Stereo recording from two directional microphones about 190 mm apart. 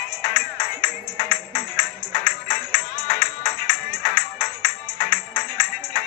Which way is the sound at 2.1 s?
50° left (ahead or behind).